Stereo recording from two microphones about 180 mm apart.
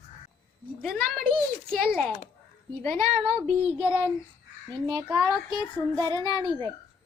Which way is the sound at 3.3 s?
10° right (ahead or behind).